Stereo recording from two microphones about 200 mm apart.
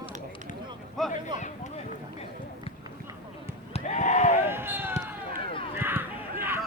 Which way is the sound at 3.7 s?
35° left (ahead or behind).